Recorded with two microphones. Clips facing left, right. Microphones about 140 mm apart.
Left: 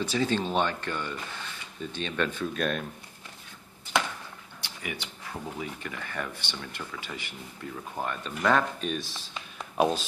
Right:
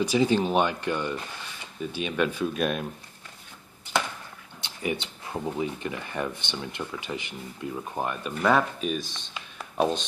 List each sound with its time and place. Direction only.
0.0 s speech: 15° right (ahead or behind)
4.6 s speech: 25° right (ahead or behind); by 10.0 s centre (ahead or behind)